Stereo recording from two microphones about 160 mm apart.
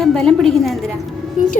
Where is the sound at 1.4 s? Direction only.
55° left (ahead or behind).